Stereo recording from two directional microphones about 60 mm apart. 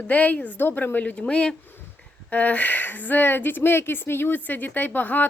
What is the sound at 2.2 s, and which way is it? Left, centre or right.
Speech, left.